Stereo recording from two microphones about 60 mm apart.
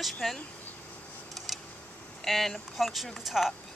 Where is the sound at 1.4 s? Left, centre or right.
Centre.